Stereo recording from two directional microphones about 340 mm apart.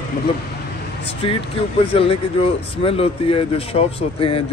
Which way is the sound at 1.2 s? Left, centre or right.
Centre.